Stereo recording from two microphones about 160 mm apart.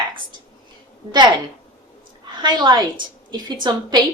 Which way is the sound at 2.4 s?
25° right (ahead or behind).